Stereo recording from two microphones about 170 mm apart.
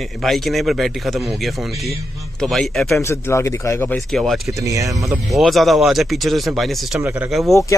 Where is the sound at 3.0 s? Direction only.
15° left (ahead or behind).